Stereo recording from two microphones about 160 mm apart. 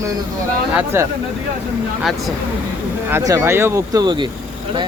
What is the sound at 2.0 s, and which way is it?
Speech, centre (ahead or behind).